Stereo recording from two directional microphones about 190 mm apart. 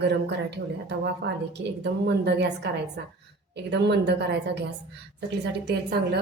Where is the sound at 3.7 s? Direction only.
65° right (ahead or behind).